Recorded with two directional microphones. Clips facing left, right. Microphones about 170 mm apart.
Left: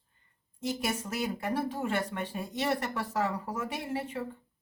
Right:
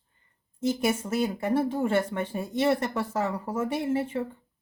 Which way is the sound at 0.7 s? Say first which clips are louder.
Right 7 dB; 25° right (ahead or behind).